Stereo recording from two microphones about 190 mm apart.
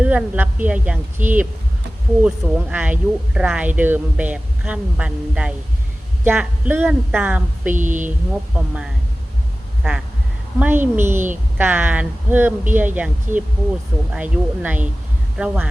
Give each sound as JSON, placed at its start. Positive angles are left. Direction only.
{"t": 0.0, "sound": "speech", "side_deg": -5}
{"t": 7.8, "sound": "speech", "side_deg": -40}
{"t": 8.3, "sound": "speech", "side_deg": -5}
{"t": 10.6, "sound": "speech", "side_deg": -10}